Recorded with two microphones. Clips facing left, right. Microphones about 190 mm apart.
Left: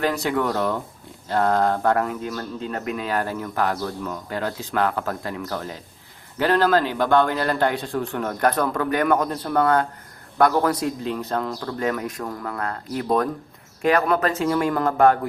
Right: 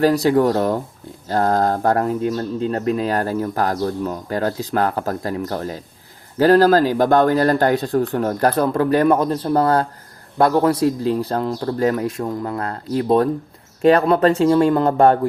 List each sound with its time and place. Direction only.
0.0 s a man's voice: 35° right (ahead or behind)